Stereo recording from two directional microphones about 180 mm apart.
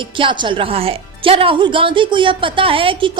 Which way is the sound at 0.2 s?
30° right (ahead or behind).